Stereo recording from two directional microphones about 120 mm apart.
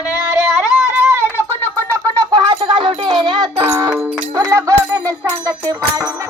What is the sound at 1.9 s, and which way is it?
Music, 30° right (ahead or behind).